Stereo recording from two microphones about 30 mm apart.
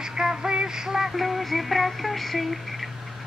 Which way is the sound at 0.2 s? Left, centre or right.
Right.